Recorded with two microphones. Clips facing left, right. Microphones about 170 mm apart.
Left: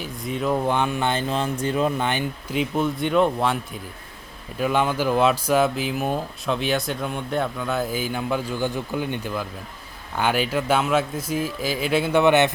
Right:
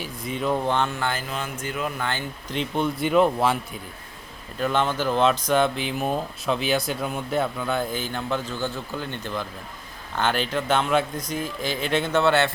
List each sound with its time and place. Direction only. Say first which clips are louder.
0.0 s speech: left 1 dB; centre (ahead or behind); by 2.0 s 30° left (ahead or behind)
2.0 s speech: left 4 dB; 15° left (ahead or behind)
2.6 s speech: left 2 dB; centre (ahead or behind)
4.5 s speech: left 2 dB; 10° left (ahead or behind)